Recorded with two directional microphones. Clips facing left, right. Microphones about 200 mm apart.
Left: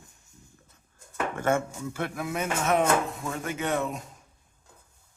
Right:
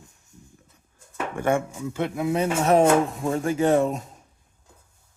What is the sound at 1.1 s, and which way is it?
Speech, 15° right (ahead or behind).